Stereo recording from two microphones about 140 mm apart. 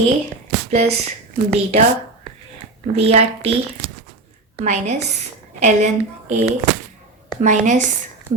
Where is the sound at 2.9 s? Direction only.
50° right (ahead or behind).